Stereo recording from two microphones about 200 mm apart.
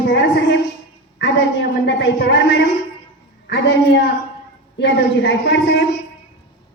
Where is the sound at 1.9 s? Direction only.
60° left (ahead or behind).